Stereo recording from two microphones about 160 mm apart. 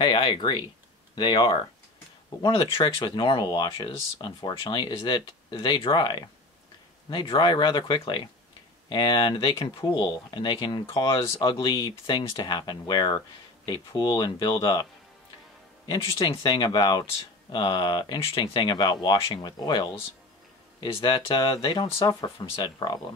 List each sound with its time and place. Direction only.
0.0 s speech: 30° left (ahead or behind)
15.9 s speech: 25° left (ahead or behind)